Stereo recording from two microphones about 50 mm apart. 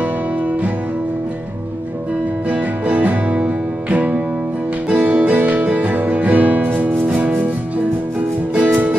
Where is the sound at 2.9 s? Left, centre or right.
Right.